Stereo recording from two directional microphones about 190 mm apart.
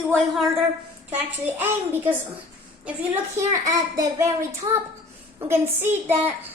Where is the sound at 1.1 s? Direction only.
10° right (ahead or behind).